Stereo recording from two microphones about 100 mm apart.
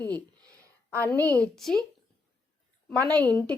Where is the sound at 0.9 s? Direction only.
20° left (ahead or behind).